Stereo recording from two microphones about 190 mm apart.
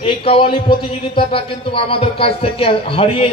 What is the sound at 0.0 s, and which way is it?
A man's voice, 30° left (ahead or behind).